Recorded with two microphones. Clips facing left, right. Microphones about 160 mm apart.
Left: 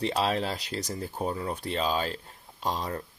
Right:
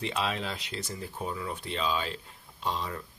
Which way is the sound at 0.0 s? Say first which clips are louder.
Left 5 dB; 35° left (ahead or behind).